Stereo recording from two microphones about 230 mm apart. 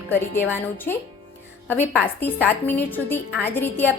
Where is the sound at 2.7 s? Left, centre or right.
Centre.